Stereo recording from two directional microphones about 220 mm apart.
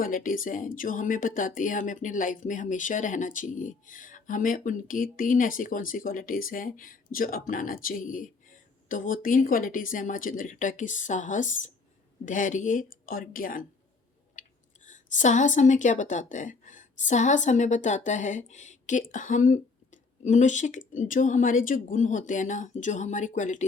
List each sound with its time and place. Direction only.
0.0 s speech: 40° left (ahead or behind)
14.8 s a woman's voice: 35° left (ahead or behind)